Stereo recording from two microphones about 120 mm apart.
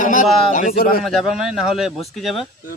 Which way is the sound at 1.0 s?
Centre (ahead or behind).